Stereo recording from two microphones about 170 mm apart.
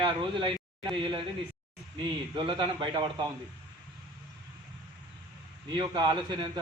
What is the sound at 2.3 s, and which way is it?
Speech, 30° right (ahead or behind).